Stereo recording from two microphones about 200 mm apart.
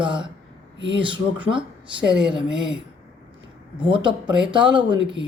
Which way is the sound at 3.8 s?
25° right (ahead or behind).